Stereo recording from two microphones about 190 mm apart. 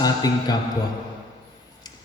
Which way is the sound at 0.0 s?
20° left (ahead or behind).